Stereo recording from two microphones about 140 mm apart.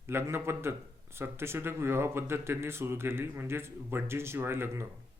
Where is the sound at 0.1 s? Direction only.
15° right (ahead or behind).